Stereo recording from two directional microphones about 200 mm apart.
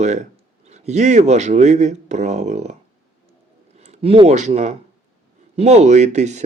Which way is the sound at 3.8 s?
30° right (ahead or behind).